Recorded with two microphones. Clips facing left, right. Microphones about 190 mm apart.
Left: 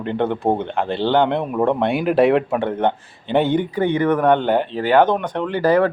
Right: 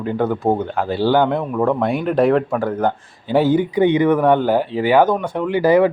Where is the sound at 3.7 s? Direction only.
15° right (ahead or behind).